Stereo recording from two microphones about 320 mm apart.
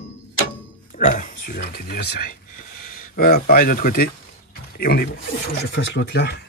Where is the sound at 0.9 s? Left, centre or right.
Left.